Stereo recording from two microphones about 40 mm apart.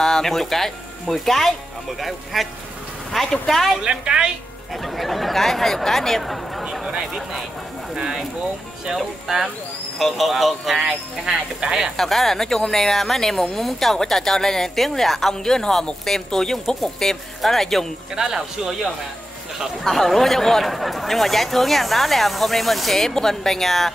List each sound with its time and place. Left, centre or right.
0.0 s speech: centre
3.8 s a woman's voice: right
4.8 s speech: centre
7.9 s speech: centre
12.0 s speech: centre
16.6 s speech: centre
18.1 s speech: centre
19.8 s speech: centre